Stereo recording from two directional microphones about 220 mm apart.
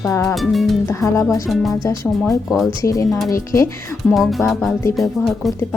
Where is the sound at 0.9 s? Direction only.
15° left (ahead or behind).